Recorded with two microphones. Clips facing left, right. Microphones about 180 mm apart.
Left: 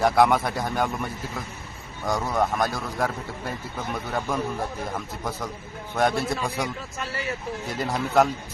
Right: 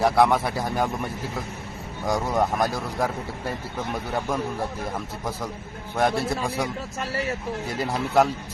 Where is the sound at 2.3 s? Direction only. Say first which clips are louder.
Even; 10° right (ahead or behind).